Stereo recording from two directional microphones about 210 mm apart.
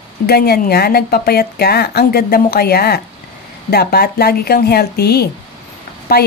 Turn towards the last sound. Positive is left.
turn(degrees=50)  # may be behind; listen again after turning